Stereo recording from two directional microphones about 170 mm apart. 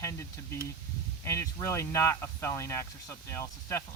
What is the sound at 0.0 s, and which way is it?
Speech, 15° left (ahead or behind).